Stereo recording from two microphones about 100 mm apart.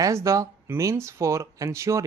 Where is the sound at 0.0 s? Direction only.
30° right (ahead or behind).